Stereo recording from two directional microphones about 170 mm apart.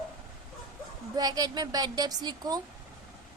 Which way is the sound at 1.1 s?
20° right (ahead or behind).